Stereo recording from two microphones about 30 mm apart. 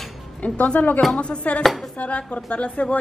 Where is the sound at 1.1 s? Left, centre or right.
Left.